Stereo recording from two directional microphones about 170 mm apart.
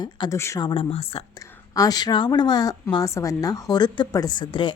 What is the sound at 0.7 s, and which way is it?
Speech, 35° left (ahead or behind).